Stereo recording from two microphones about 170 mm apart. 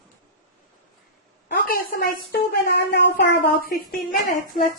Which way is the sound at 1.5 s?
60° left (ahead or behind).